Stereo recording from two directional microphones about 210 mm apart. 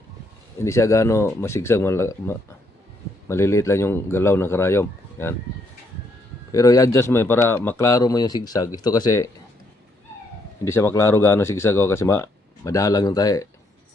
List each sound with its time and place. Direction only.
0.6 s speech: 15° left (ahead or behind)
6.5 s speech: 15° left (ahead or behind)
10.6 s speech: 15° left (ahead or behind)